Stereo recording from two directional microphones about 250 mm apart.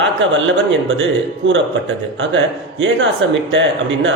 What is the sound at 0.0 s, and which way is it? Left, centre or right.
Speech, right.